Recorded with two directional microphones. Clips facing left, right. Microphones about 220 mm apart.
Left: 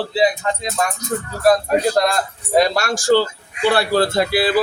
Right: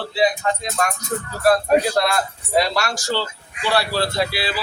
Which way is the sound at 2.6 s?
50° left (ahead or behind).